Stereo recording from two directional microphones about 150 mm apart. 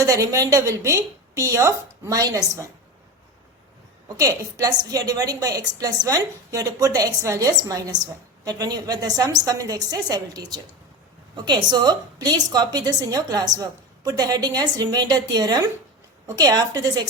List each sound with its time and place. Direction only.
0.0 s a woman's voice: 20° right (ahead or behind)
4.2 s a woman's voice: 25° right (ahead or behind)